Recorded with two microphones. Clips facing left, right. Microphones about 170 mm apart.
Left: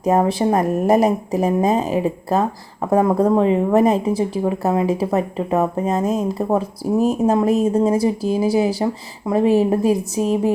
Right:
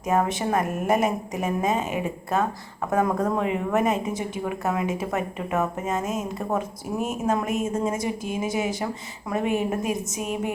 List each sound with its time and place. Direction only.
0.0 s a woman's voice: 35° left (ahead or behind)